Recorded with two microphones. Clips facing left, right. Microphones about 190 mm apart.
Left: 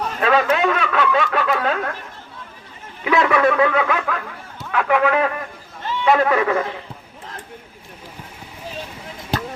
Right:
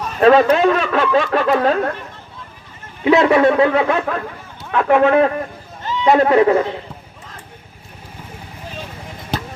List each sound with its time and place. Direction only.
0.2 s speech: 35° right (ahead or behind)
3.0 s speech: 30° right (ahead or behind)